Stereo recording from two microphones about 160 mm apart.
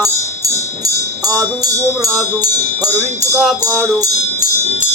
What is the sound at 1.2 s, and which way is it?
Music, 20° right (ahead or behind).